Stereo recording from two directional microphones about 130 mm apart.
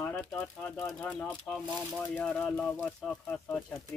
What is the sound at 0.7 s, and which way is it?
Speech, 20° left (ahead or behind).